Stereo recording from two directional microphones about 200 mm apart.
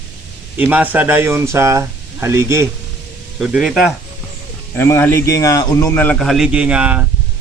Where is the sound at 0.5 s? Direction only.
10° right (ahead or behind).